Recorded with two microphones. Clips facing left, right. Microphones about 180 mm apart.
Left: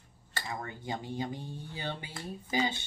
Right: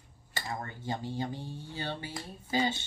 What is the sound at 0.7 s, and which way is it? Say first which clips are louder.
Speech: right 1 dB; 15° left (ahead or behind).